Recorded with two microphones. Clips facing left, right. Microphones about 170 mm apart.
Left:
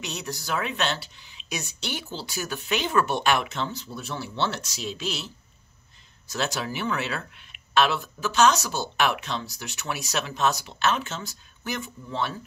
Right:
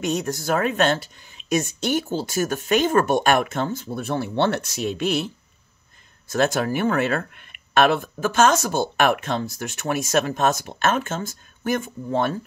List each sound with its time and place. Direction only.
0.0 s speech: 50° right (ahead or behind)